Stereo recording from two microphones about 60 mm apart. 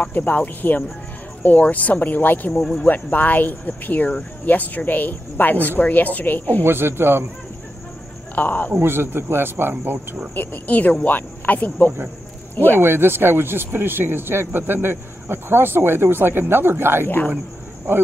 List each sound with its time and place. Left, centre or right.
0.0 s speech: left
6.6 s speech: right
8.4 s speech: left
8.7 s speech: right
10.3 s speech: left
12.7 s speech: right